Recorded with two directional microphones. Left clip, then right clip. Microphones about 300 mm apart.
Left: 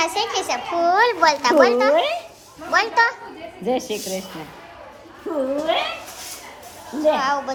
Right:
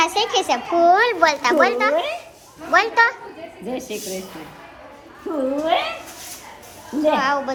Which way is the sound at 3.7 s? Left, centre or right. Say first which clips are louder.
Left 6 dB; left.